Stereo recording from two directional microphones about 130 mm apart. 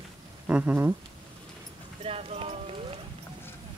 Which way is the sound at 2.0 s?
50° right (ahead or behind).